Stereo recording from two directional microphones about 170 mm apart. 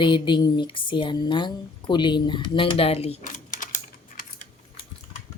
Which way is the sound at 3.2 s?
50° left (ahead or behind).